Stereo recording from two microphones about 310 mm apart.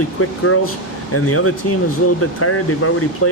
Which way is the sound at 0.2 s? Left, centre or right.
Left.